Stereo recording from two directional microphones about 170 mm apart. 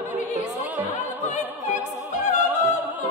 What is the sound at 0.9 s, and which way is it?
Opera, 45° left (ahead or behind).